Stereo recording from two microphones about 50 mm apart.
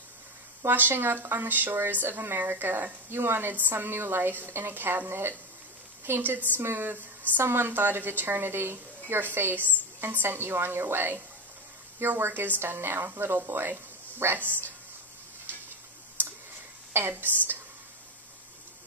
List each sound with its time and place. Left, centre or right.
0.7 s a woman's voice: right
3.7 s a woman's voice: right
12.2 s a woman's voice: right
17.1 s a woman's voice: right